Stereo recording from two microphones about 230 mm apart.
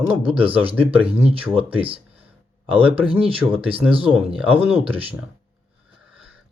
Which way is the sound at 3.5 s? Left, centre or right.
Right.